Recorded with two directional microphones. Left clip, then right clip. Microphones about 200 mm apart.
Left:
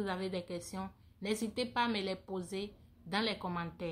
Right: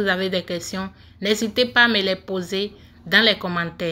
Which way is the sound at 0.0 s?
Centre (ahead or behind).